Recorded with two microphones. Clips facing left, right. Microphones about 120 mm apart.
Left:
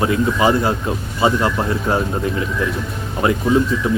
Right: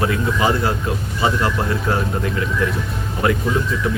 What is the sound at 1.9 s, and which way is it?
Speech, 20° left (ahead or behind).